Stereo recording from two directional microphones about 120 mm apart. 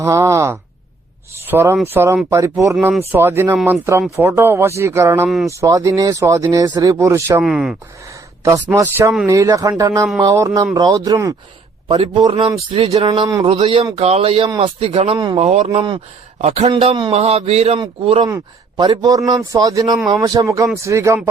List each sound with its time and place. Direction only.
0.0 s speech: 25° right (ahead or behind)
7.4 s speech: 5° right (ahead or behind)
8.6 s speech: 20° right (ahead or behind)
11.9 s speech: 50° right (ahead or behind)
15.4 s speech: 65° right (ahead or behind)
17.7 s speech: 50° right (ahead or behind)
18.8 s speech: 35° right (ahead or behind)